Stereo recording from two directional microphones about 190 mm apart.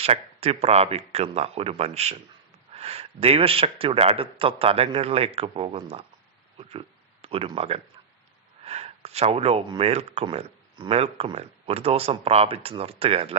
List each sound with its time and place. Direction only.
0.0 s speech: 30° right (ahead or behind)